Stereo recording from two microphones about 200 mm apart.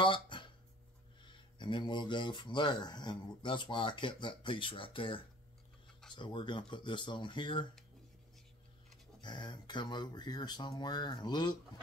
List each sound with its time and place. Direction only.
0.0 s a sound: 25° left (ahead or behind)
1.6 s speech: 25° left (ahead or behind)
9.2 s speech: 20° left (ahead or behind)